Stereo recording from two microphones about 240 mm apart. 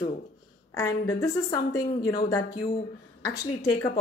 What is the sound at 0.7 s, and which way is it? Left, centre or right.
A woman's voice, centre.